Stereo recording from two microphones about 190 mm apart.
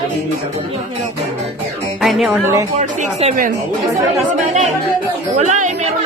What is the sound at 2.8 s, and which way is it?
Speech, 35° right (ahead or behind).